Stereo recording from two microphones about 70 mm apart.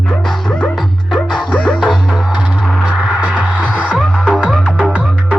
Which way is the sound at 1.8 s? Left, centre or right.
Centre.